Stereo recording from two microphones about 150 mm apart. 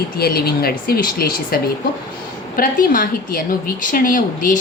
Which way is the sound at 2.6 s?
65° left (ahead or behind).